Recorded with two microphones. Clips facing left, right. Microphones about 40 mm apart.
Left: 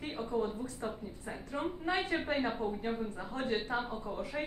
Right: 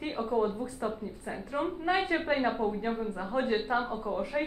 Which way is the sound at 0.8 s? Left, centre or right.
Centre.